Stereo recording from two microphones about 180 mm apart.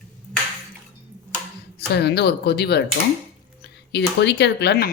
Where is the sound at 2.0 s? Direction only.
65° left (ahead or behind).